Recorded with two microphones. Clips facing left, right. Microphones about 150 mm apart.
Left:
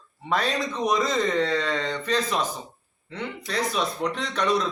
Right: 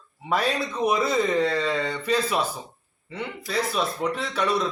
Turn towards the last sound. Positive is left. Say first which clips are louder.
# even
turn(degrees=-5)  # may be behind; listen again after turning